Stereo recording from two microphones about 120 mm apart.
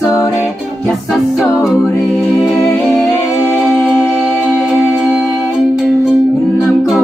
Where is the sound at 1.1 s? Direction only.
5° right (ahead or behind).